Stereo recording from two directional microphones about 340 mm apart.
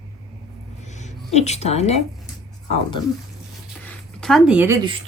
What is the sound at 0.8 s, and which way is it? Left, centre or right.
Music, left.